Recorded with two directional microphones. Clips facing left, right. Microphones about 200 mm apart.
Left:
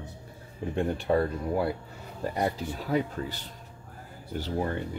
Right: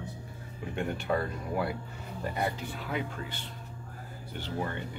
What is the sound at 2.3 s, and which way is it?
Speech, 40° left (ahead or behind).